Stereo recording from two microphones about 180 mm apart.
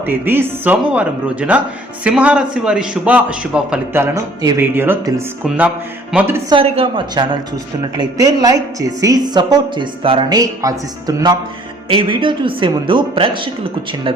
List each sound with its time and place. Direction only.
0.0 s a man's voice: 10° right (ahead or behind)
6.5 s a woman's voice: 30° right (ahead or behind)